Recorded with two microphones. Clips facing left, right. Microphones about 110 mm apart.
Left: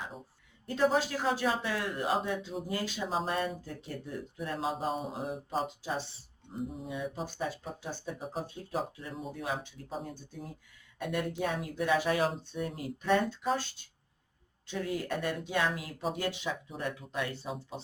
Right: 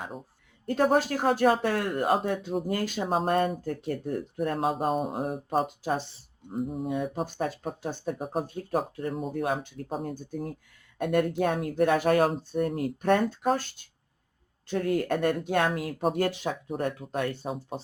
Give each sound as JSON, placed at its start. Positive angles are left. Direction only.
{"t": 0.7, "sound": "speech", "side_deg": -55}
{"t": 6.7, "sound": "speech", "side_deg": -50}
{"t": 14.7, "sound": "speech", "side_deg": -55}